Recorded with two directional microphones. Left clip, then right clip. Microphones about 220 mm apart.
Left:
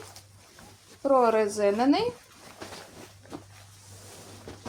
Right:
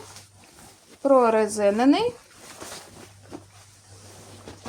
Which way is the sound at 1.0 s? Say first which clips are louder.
Right 4 dB; 40° right (ahead or behind).